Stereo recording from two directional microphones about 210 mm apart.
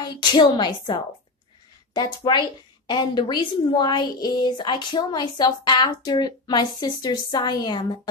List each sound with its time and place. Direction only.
0.0 s a woman's voice: 20° left (ahead or behind)